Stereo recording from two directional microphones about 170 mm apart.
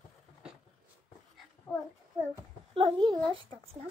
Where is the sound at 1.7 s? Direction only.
Centre (ahead or behind).